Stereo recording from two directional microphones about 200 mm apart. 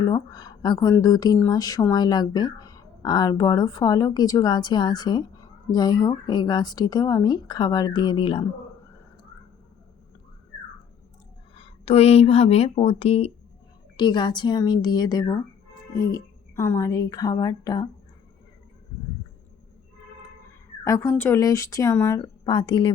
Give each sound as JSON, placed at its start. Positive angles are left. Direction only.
{"t": 0.0, "sound": "speech", "side_deg": 20}
{"t": 11.5, "sound": "speech", "side_deg": 30}
{"t": 20.8, "sound": "speech", "side_deg": 15}